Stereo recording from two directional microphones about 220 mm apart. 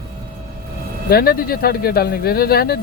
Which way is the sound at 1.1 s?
45° left (ahead or behind).